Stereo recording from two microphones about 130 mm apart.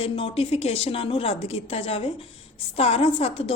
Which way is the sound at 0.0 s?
50° left (ahead or behind).